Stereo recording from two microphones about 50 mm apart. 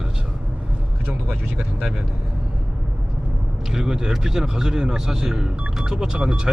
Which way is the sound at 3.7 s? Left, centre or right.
Centre.